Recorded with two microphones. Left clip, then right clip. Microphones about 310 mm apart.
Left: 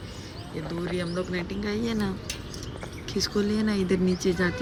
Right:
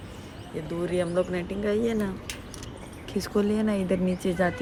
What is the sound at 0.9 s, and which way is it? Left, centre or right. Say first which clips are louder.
Speech: right 6 dB; centre.